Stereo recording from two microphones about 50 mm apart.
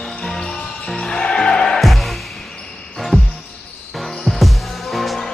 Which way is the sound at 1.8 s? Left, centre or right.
Centre.